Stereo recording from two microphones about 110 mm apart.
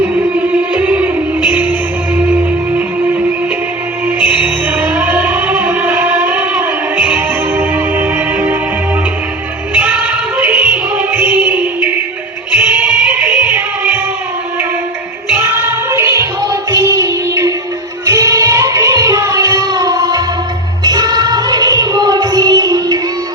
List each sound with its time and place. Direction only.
0.8 s music: 15° right (ahead or behind)
4.3 s music: 15° right (ahead or behind)
9.7 s music: 15° right (ahead or behind)
15.4 s music: 25° right (ahead or behind)